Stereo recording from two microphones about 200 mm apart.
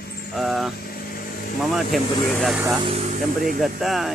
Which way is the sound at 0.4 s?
Centre (ahead or behind).